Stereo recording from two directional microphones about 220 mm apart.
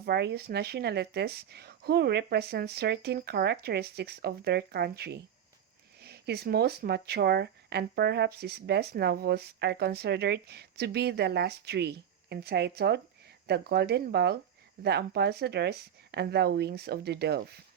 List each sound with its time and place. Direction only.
0.0 s speech: 50° right (ahead or behind)